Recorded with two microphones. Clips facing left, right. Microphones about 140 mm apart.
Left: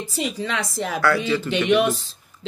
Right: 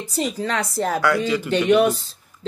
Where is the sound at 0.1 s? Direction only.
40° right (ahead or behind).